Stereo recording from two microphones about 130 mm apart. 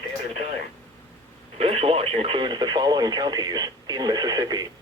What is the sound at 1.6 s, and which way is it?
Radio, 50° right (ahead or behind).